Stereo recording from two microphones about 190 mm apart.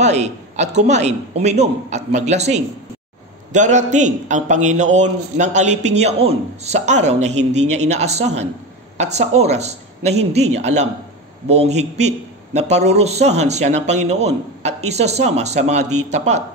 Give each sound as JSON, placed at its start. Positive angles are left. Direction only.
{"t": 0.0, "sound": "a man's voice", "side_deg": -35}